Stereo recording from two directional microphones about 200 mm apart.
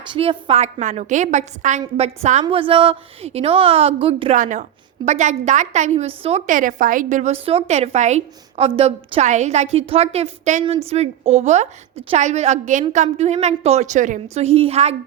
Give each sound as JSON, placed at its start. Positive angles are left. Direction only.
{"t": 0.1, "sound": "a woman's voice", "side_deg": -25}
{"t": 4.4, "sound": "a woman's voice", "side_deg": -40}